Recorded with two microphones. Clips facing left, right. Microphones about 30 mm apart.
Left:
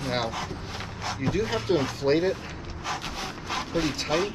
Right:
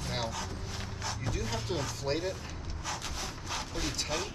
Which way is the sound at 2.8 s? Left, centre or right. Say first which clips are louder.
Left 6 dB; left.